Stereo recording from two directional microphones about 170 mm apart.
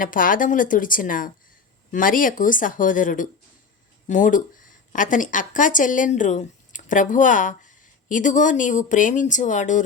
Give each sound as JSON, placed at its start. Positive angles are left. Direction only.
{"t": 0.0, "sound": "a woman's voice", "side_deg": 55}